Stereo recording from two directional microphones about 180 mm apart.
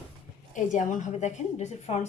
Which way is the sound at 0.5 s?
45° left (ahead or behind).